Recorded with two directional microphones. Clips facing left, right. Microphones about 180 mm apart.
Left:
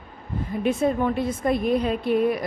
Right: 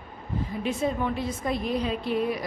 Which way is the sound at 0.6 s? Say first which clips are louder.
Left 6 dB; 55° left (ahead or behind).